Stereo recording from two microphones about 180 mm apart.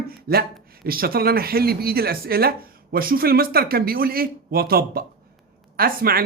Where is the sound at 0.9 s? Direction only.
55° right (ahead or behind).